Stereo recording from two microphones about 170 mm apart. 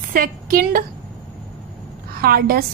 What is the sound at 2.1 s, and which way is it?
Speech, 60° right (ahead or behind).